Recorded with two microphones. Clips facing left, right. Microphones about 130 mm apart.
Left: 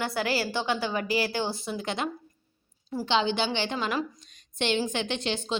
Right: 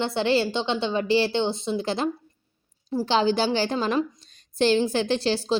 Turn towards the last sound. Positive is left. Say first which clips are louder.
# right 7 dB
turn(degrees=-35)  # may be behind; listen again after turning